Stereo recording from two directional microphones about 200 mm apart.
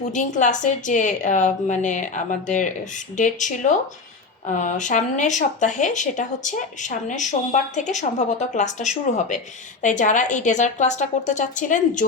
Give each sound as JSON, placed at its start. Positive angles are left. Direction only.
{"t": 0.1, "sound": "speech", "side_deg": 40}